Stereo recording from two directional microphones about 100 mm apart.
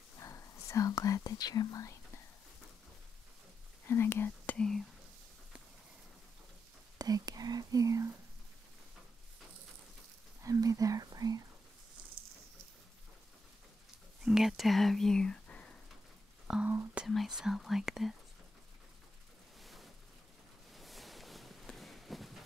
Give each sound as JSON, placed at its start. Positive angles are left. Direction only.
{"t": 0.2, "sound": "speech", "side_deg": 30}
{"t": 3.8, "sound": "speech", "side_deg": 25}
{"t": 4.6, "sound": "speech", "side_deg": 5}
{"t": 7.0, "sound": "speech", "side_deg": -40}
{"t": 10.4, "sound": "speech", "side_deg": -35}
{"t": 14.2, "sound": "speech", "side_deg": -5}
{"t": 16.6, "sound": "speech", "side_deg": -20}
{"t": 17.0, "sound": "speech", "side_deg": -5}
{"t": 19.6, "sound": "a sound", "side_deg": 0}